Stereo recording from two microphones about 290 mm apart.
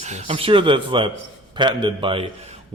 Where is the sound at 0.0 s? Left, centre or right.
Right.